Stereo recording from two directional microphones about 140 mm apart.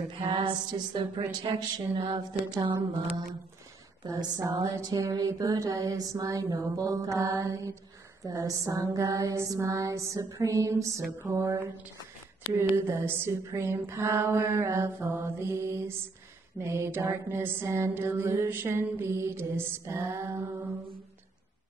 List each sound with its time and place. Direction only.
0.3 s music: 35° right (ahead or behind)
4.0 s a sound: 30° right (ahead or behind)
12.5 s mantra: 15° right (ahead or behind)